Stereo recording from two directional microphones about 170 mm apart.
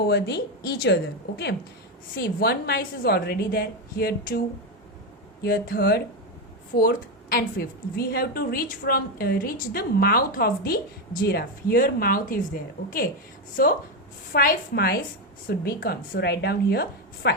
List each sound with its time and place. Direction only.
0.1 s a woman's voice: 70° left (ahead or behind)
2.1 s a woman's voice: 65° left (ahead or behind)
13.6 s a woman's voice: 60° left (ahead or behind)